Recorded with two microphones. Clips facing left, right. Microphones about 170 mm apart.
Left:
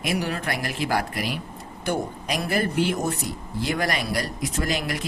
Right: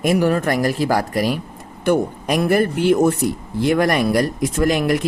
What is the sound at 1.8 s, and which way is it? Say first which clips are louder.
A man's voice: right 9 dB; 55° right (ahead or behind).